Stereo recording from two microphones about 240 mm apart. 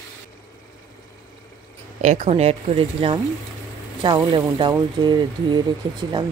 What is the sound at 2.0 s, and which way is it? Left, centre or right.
Speech, right.